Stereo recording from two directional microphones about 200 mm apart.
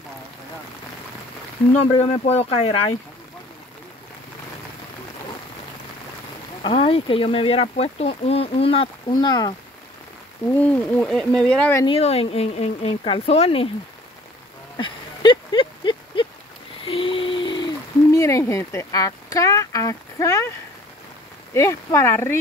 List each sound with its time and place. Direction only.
1.9 s speech: 25° left (ahead or behind)
6.6 s speech: 30° left (ahead or behind)
10.5 s speech: 5° left (ahead or behind)
11.8 s speech: 30° left (ahead or behind)
14.8 s a sound: 25° left (ahead or behind)
18.1 s speech: 15° left (ahead or behind)
21.5 s speech: 15° left (ahead or behind)